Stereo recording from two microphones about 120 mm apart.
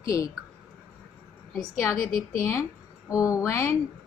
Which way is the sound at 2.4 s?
20° left (ahead or behind).